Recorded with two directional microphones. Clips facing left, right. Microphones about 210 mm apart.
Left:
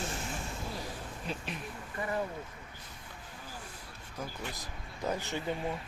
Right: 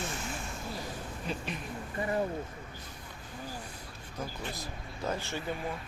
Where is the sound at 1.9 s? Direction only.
30° right (ahead or behind).